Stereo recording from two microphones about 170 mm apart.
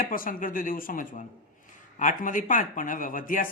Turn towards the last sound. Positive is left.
turn(degrees=55)  # may be behind; listen again after turning